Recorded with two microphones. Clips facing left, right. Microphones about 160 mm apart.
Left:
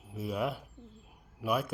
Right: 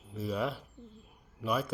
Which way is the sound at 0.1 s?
5° left (ahead or behind).